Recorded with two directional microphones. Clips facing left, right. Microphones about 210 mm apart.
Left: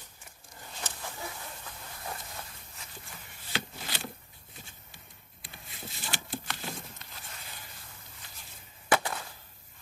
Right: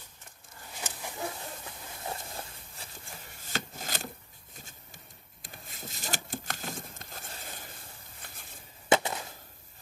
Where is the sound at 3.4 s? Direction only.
45° right (ahead or behind).